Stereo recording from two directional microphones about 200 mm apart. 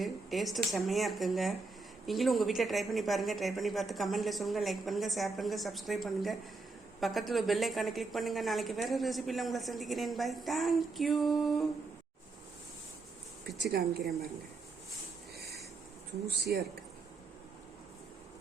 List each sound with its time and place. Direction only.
0.0 s a woman's voice: centre (ahead or behind)
13.6 s a woman's voice: 50° right (ahead or behind)